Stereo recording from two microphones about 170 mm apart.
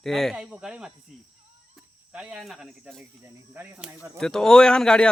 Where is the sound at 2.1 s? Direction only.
5° right (ahead or behind).